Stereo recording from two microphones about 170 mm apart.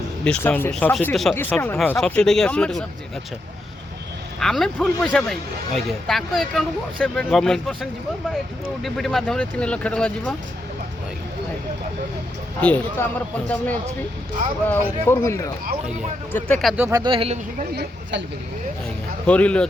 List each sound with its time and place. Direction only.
0.3 s speech: 10° left (ahead or behind)
4.4 s speech: centre (ahead or behind)
12.5 s speech: 10° left (ahead or behind)
14.7 s speech: 15° left (ahead or behind)
16.3 s speech: 5° left (ahead or behind)
16.7 s speech: 10° right (ahead or behind)
17.0 s speech: 30° right (ahead or behind)
19.2 s speech: 5° left (ahead or behind)